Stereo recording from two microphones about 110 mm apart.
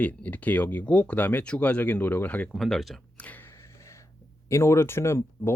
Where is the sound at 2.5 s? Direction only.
Centre (ahead or behind).